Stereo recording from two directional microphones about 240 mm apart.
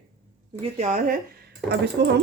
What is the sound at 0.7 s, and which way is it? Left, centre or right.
Speech, right.